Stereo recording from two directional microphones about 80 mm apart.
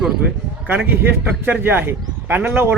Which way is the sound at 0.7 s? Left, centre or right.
Right.